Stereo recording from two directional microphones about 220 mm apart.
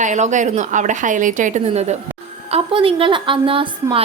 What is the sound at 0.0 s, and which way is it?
A woman's voice, 35° right (ahead or behind).